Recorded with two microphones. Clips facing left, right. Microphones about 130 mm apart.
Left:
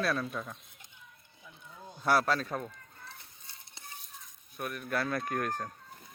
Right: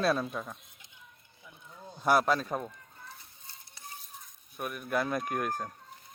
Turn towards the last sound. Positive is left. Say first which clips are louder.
# right 1 dB
turn(degrees=-10)  # may be behind; listen again after turning